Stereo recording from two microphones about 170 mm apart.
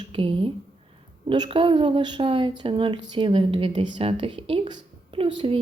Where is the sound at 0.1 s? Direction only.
30° right (ahead or behind).